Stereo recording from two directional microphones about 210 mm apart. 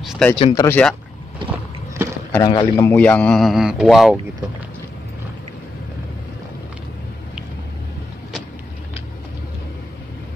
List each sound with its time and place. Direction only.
0.0 s speech: centre (ahead or behind)
0.4 s speech: 25° left (ahead or behind)
0.7 s speech: 5° left (ahead or behind)
2.0 s a sound: 10° right (ahead or behind)
2.4 s speech: 20° left (ahead or behind); by 4.2 s centre (ahead or behind)